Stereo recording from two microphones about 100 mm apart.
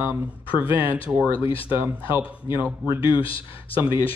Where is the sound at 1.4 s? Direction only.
65° left (ahead or behind).